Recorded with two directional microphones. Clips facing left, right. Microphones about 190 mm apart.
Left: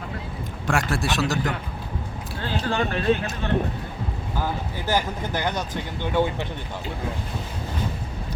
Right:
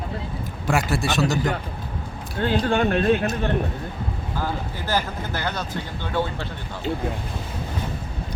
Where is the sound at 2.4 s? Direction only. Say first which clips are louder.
Right 9 dB; 55° right (ahead or behind).